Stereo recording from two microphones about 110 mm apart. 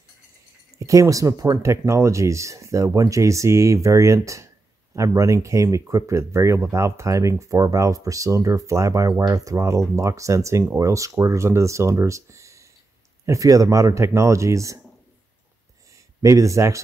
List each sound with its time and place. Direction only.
0.7 s speech: 30° right (ahead or behind)
16.2 s speech: 30° right (ahead or behind)